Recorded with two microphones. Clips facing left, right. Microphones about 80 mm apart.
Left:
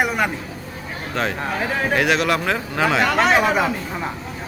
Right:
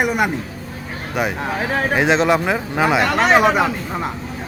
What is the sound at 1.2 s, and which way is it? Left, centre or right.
Speech, centre.